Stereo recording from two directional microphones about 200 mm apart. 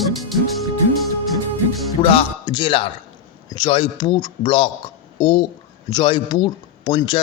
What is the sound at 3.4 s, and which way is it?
Speech, 20° left (ahead or behind).